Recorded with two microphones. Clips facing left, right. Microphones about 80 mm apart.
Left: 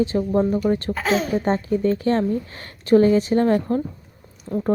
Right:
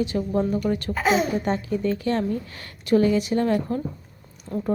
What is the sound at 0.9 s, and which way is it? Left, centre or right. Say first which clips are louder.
Speech: even; centre.